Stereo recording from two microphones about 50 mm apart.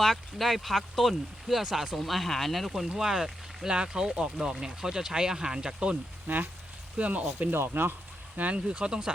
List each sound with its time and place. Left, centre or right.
0.0 s speech: centre
6.2 s speech: right
7.5 s speech: right
8.4 s speech: right